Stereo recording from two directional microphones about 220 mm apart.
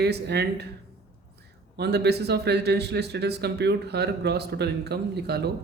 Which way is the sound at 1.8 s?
50° right (ahead or behind).